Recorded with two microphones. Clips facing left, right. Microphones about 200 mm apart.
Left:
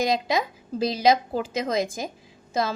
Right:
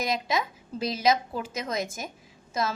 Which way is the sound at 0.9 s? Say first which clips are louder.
Left 4 dB; 30° left (ahead or behind).